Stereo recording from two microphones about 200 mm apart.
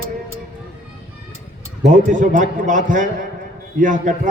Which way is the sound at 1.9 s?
40° right (ahead or behind).